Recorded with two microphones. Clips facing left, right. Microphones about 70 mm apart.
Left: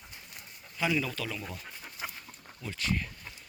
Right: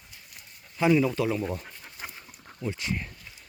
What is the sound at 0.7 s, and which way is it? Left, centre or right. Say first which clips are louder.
Speech: right 8 dB; right.